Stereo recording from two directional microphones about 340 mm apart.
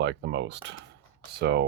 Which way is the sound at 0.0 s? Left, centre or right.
Right.